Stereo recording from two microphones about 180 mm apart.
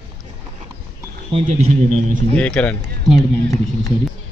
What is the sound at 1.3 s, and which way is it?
Speech, 40° right (ahead or behind).